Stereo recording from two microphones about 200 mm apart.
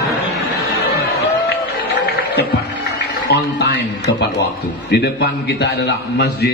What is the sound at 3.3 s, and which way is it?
A man's voice, 55° left (ahead or behind).